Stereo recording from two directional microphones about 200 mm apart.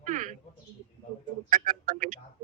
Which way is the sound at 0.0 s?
40° right (ahead or behind).